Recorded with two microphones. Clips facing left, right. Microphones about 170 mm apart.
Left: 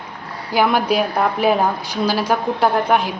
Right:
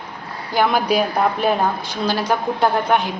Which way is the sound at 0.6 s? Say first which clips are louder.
Left 1 dB; 5° left (ahead or behind).